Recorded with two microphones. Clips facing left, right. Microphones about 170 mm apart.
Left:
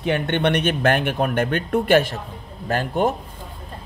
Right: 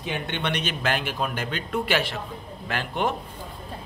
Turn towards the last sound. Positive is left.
turn(degrees=45)  # may be behind; listen again after turning